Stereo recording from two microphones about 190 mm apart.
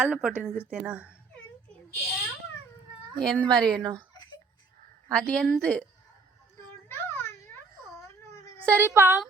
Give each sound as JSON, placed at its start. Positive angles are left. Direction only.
{"t": 0.0, "sound": "a woman's voice", "side_deg": -5}
{"t": 3.2, "sound": "a woman's voice", "side_deg": 5}
{"t": 5.1, "sound": "a woman's voice", "side_deg": 5}
{"t": 6.8, "sound": "a sound", "side_deg": 15}
{"t": 8.7, "sound": "a woman's voice", "side_deg": -10}